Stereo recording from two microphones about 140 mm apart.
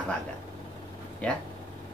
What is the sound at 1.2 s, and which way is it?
Speech, 5° left (ahead or behind).